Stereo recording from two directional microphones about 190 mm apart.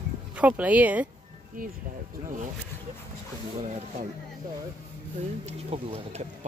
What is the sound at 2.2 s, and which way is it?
Speech, 45° right (ahead or behind).